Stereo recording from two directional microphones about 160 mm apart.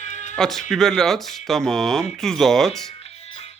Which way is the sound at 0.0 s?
50° left (ahead or behind).